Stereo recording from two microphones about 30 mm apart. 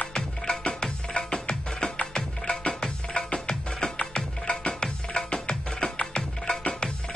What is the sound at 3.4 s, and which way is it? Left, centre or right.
Music, left.